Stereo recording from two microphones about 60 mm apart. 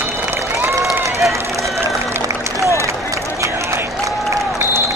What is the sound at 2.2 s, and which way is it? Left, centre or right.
Run, right.